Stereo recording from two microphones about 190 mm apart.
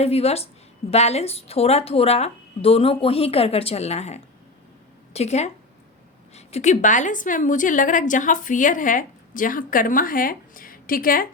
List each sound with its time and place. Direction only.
0.0 s a woman's voice: 35° left (ahead or behind)